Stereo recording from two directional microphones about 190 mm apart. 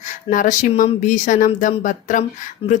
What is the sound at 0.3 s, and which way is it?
A woman's voice, 45° left (ahead or behind).